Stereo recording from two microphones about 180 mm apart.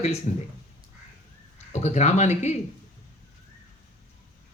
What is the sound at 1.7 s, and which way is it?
Speech, 40° left (ahead or behind).